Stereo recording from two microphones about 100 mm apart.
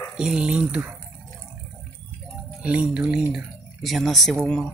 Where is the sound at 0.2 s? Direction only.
10° right (ahead or behind).